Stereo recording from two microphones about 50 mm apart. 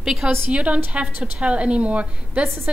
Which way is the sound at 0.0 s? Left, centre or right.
Centre.